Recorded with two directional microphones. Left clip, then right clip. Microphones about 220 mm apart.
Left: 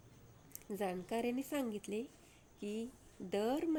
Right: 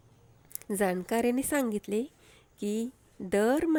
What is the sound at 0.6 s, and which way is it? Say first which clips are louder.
Speech: right 11 dB; 25° right (ahead or behind).